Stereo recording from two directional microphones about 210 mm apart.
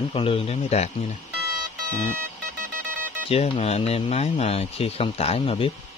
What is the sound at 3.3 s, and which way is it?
Speech, 30° left (ahead or behind).